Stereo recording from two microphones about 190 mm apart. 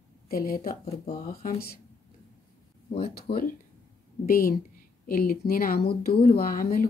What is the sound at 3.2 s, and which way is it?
A woman's voice, 55° left (ahead or behind).